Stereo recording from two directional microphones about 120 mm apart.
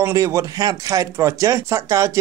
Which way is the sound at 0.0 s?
25° right (ahead or behind).